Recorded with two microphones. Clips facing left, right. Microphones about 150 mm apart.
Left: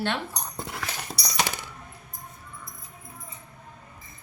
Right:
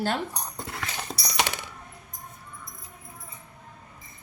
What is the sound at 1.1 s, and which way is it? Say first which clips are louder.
Coin: right 1 dB; 65° right (ahead or behind).